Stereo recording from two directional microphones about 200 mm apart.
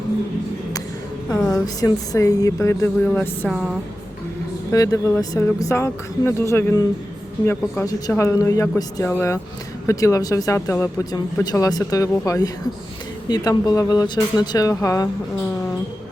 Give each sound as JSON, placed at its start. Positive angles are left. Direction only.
{"t": 1.5, "sound": "a woman's voice", "side_deg": 15}
{"t": 4.7, "sound": "speech", "side_deg": 15}